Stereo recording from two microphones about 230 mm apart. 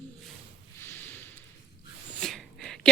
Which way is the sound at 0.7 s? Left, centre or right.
Centre.